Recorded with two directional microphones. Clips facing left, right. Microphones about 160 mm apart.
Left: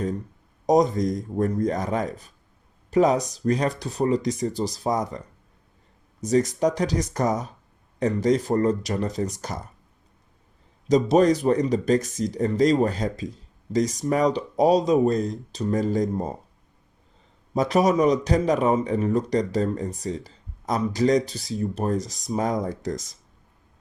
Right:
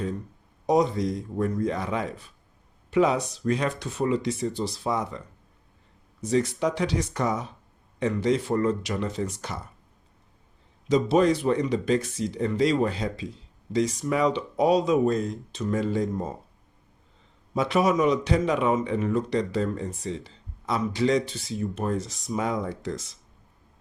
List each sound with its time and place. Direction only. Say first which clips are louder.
0.7 s a man's voice: left 3 dB; 40° left (ahead or behind)
6.2 s a man's voice: left 3 dB; 40° left (ahead or behind)
10.8 s a man's voice: left 3 dB; 40° left (ahead or behind)
17.5 s a man's voice: left 3 dB; 40° left (ahead or behind)